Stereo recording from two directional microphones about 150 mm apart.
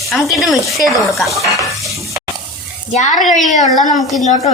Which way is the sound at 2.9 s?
55° left (ahead or behind).